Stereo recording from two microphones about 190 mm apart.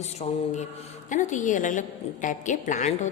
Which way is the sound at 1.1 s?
40° left (ahead or behind).